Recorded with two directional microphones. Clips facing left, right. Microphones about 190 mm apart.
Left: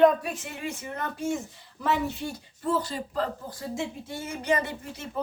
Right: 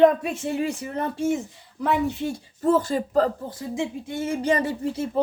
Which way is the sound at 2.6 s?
50° right (ahead or behind).